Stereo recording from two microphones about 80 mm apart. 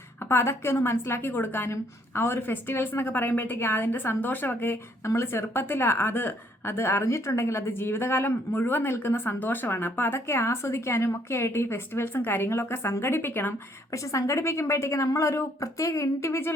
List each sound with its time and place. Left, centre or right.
0.2 s a woman's voice: left
13.9 s a woman's voice: left